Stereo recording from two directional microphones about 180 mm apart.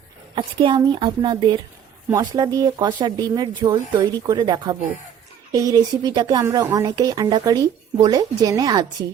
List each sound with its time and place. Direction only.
0.3 s a woman's voice: 25° right (ahead or behind)